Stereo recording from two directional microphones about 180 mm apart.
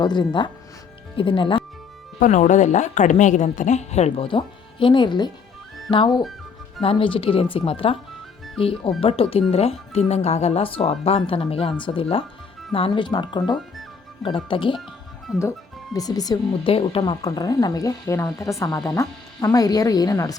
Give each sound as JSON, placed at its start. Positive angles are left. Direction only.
{"t": 0.0, "sound": "speech", "side_deg": 25}
{"t": 2.1, "sound": "speech", "side_deg": 45}
{"t": 15.4, "sound": "speech", "side_deg": 15}